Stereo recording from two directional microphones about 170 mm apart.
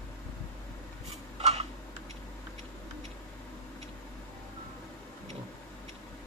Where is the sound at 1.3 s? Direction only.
40° right (ahead or behind).